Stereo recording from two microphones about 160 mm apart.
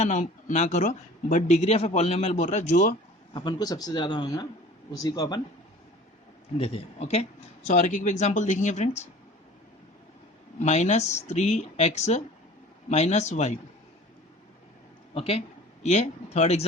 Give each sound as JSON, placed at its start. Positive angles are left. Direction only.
{"t": 0.0, "sound": "speech", "side_deg": 50}
{"t": 3.3, "sound": "speech", "side_deg": 25}
{"t": 6.6, "sound": "speech", "side_deg": 40}
{"t": 7.7, "sound": "speech", "side_deg": 50}
{"t": 10.6, "sound": "speech", "side_deg": 45}
{"t": 15.1, "sound": "a man's voice", "side_deg": 40}